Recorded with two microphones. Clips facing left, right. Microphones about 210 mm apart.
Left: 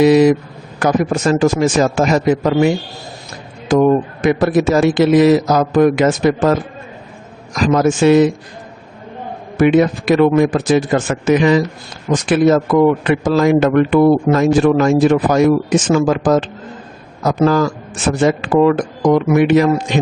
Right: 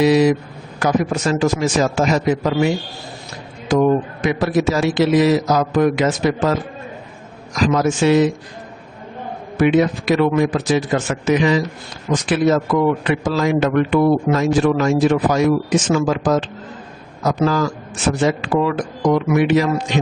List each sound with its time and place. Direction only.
0.0 s a man's voice: 50° left (ahead or behind)
4.2 s a man's voice: 50° left (ahead or behind)
7.5 s a man's voice: 50° left (ahead or behind)
9.6 s a man's voice: 50° left (ahead or behind)